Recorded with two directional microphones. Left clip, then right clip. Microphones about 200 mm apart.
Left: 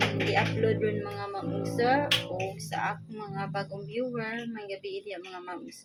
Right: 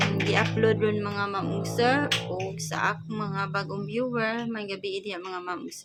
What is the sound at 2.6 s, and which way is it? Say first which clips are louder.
Speech: right 4 dB; 25° right (ahead or behind).